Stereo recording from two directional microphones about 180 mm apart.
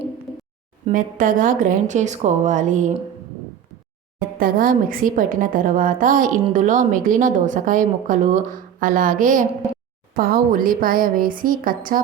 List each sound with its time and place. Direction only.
0.9 s a woman's voice: 50° right (ahead or behind)
4.4 s a woman's voice: 55° right (ahead or behind)